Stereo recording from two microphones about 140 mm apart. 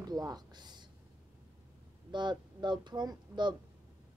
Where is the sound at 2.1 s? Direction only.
35° right (ahead or behind).